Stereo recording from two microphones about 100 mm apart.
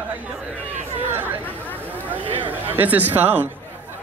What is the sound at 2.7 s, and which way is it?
Speech, 15° right (ahead or behind).